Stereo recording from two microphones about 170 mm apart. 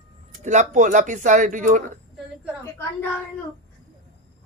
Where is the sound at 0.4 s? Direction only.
45° right (ahead or behind).